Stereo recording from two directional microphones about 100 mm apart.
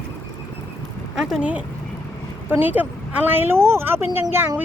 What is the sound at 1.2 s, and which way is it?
Speech, 5° right (ahead or behind).